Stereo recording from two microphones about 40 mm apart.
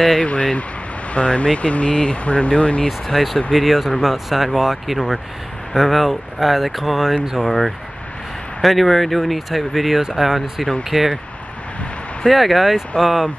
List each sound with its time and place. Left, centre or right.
0.2 s speech: left
3.1 s speech: centre
8.6 s speech: centre
12.3 s speech: centre